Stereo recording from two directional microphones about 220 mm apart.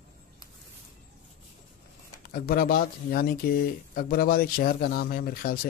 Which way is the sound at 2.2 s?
40° left (ahead or behind).